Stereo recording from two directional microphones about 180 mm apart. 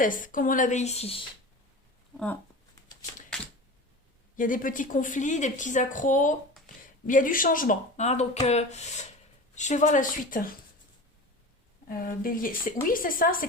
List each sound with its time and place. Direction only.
0.0 s a woman's voice: 50° left (ahead or behind)
2.1 s speech: 10° left (ahead or behind)
4.4 s a woman's voice: 50° left (ahead or behind)
6.7 s a sound: 50° left (ahead or behind)
7.1 s a woman's voice: 50° left (ahead or behind)
11.9 s a woman's voice: 50° left (ahead or behind)